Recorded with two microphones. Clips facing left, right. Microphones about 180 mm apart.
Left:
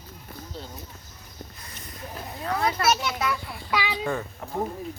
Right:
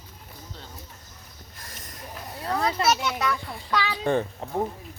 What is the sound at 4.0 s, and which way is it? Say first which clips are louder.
Speech: right 5 dB; 30° right (ahead or behind).